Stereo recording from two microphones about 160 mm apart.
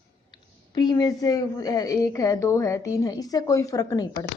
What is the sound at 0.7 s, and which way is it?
A woman's voice, 25° left (ahead or behind).